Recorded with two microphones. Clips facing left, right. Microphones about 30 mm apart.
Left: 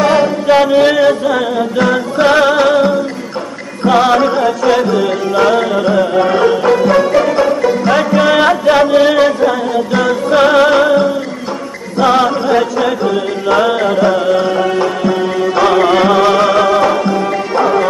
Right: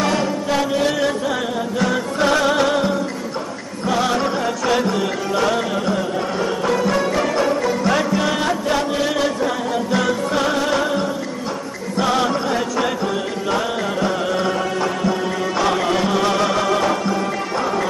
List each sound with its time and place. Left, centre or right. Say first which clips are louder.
0.1 s music: left 10 dB; left
4.0 s music: left 7 dB; left
4.5 s music: left 7 dB; centre
6.1 s music: left 11 dB; left
6.5 s music: left 9 dB; left
12.0 s chant: left 8 dB; left
13.5 s music: left 11 dB; left
13.8 s music: left 9 dB; centre